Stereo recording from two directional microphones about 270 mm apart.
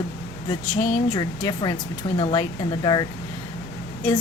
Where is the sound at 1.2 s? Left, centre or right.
Centre.